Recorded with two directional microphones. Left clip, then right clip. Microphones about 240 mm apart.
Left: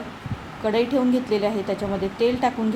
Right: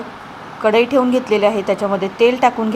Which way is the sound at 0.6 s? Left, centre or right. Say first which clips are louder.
Right 8 dB; centre.